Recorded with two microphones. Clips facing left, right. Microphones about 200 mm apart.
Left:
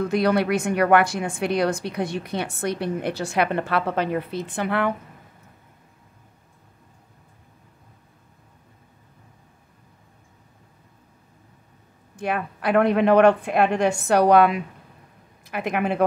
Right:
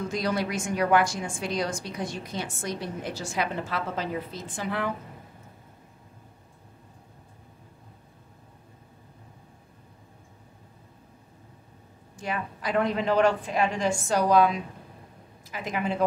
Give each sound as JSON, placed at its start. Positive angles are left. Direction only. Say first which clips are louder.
{"t": 0.0, "sound": "a woman's voice", "louder": "left 7 dB", "side_deg": 60}
{"t": 12.2, "sound": "a woman's voice", "louder": "left 6 dB", "side_deg": 60}